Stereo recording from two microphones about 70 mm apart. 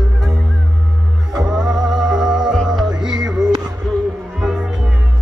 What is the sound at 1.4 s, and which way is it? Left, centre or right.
Music, centre.